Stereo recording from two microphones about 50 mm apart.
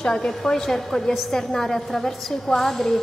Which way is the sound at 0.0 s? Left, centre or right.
Centre.